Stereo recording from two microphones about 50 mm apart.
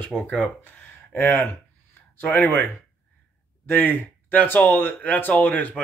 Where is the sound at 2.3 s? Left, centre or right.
Left.